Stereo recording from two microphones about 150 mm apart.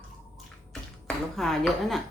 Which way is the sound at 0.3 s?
Centre (ahead or behind).